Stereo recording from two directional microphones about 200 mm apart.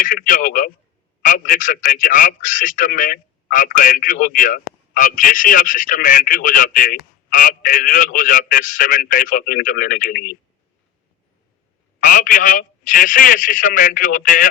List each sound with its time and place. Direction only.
0.0 s a man's voice: 40° left (ahead or behind)
11.9 s a man's voice: 40° left (ahead or behind)